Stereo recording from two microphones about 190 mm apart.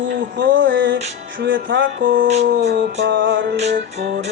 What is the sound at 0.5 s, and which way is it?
Music, 80° right.